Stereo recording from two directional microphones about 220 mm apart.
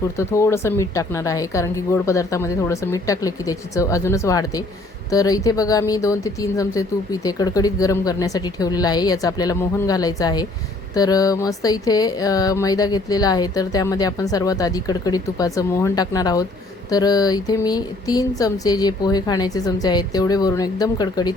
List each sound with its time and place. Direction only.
0.2 s speech: 15° left (ahead or behind)